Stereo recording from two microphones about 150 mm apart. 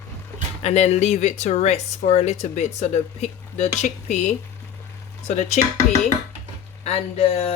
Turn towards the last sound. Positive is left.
turn(degrees=40)  # may be behind; listen again after turning